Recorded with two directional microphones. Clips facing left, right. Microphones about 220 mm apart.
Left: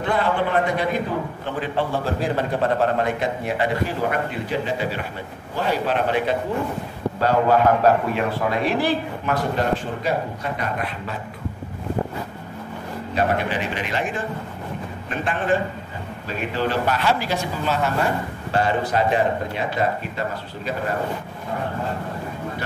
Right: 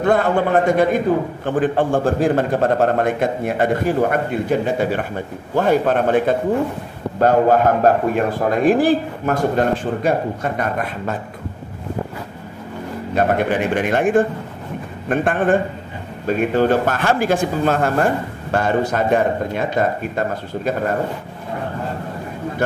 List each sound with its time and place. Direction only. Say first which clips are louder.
0.0 s speech: right 5 dB; 45° right (ahead or behind)
13.1 s speech: right 5 dB; 50° right (ahead or behind)